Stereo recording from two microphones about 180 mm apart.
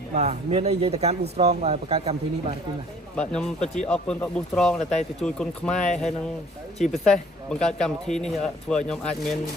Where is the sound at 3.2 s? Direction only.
5° left (ahead or behind).